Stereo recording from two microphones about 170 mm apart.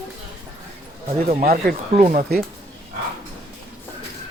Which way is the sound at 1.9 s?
45° right (ahead or behind).